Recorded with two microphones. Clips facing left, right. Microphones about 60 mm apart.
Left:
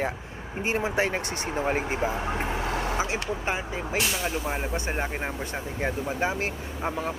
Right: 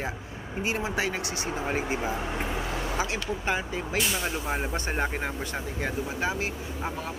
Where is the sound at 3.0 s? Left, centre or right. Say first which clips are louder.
Left 1 dB; left.